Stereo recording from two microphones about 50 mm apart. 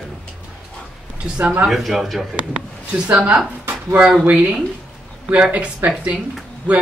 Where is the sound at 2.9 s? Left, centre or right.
Right.